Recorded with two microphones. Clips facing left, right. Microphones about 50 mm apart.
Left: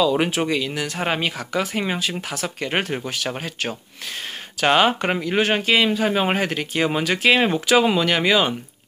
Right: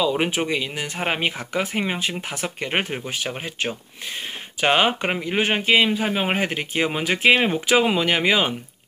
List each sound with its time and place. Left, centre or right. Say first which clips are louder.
0.2 s speech: left 2 dB; centre